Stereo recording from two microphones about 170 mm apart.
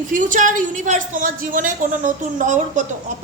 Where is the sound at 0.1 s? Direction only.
50° right (ahead or behind).